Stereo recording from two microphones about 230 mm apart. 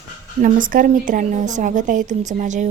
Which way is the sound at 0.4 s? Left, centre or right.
Right.